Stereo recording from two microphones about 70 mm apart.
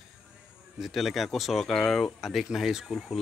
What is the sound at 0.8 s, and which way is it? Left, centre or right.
Speech, centre.